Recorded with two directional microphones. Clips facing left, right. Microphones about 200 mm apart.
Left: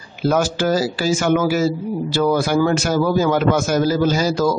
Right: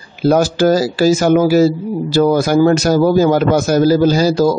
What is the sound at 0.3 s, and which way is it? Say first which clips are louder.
A man's voice: right 6 dB; 40° right (ahead or behind).